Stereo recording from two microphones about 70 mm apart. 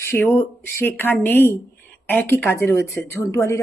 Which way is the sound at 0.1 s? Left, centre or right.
Left.